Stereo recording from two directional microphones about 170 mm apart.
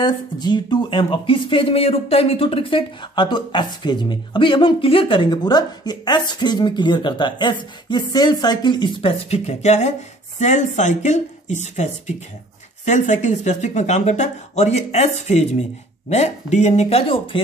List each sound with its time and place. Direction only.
0.0 s speech: 25° left (ahead or behind)
9.3 s speech: 40° left (ahead or behind)